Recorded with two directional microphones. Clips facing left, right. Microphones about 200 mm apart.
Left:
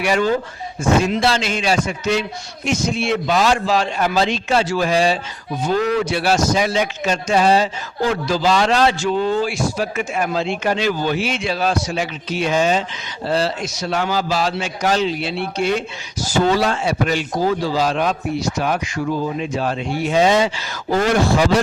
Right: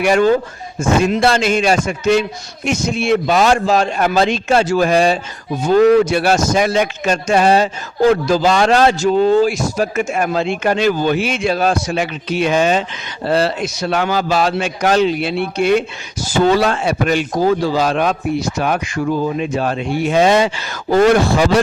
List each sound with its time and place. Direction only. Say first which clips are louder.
0.0 s a man's voice: right 5 dB; 50° right (ahead or behind)